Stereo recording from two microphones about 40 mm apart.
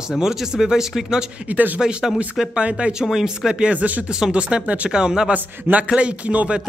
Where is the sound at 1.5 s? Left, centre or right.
Right.